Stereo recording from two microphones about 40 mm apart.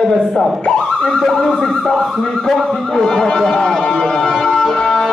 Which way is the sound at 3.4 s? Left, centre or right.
Centre.